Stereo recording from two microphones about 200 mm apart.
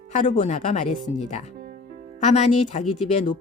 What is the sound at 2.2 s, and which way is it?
Speech, 35° left (ahead or behind).